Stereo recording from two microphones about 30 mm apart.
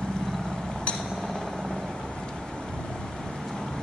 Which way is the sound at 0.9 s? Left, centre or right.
Left.